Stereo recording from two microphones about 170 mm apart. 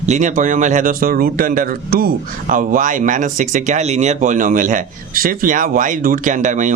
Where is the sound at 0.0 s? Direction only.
45° right (ahead or behind).